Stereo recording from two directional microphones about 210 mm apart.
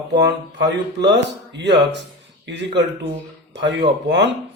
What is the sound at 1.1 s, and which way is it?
Speech, 55° right (ahead or behind).